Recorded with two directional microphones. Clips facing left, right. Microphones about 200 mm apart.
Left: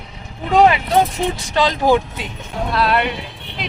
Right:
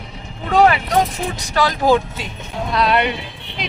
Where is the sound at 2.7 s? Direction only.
Centre (ahead or behind).